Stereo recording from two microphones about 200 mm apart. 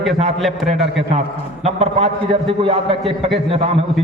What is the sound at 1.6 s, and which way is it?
A man's voice, 30° right (ahead or behind).